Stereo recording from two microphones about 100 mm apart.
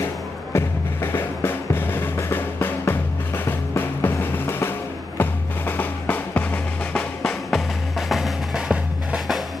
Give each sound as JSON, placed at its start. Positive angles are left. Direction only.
{"t": 0.5, "sound": "music", "side_deg": 25}
{"t": 8.1, "sound": "music", "side_deg": -5}